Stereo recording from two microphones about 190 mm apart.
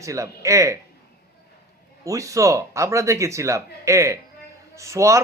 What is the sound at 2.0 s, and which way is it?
Speech, 15° right (ahead or behind).